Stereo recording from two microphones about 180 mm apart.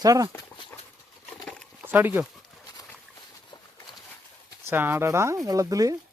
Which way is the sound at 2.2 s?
Centre (ahead or behind).